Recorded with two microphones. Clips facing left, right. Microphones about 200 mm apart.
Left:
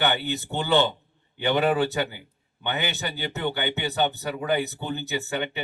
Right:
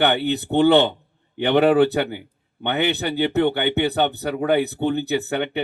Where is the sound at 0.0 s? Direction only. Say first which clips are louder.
Right 6 dB; 60° right (ahead or behind).